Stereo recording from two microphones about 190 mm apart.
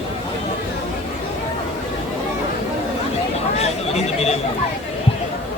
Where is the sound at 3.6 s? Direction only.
35° left (ahead or behind).